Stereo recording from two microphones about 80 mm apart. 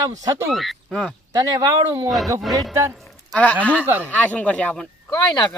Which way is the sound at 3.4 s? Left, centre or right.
Centre.